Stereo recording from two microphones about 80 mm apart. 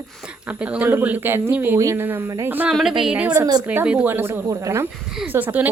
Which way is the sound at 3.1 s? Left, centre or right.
Centre.